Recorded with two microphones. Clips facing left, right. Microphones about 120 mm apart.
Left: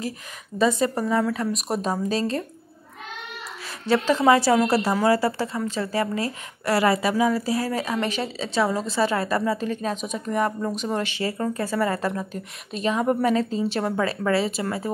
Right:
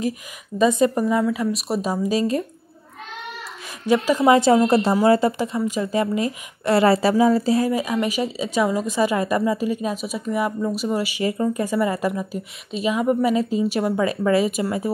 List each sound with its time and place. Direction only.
0.6 s a woman's voice: 15° right (ahead or behind)
3.8 s a woman's voice: 15° right (ahead or behind)
7.7 s a woman's voice: 10° right (ahead or behind)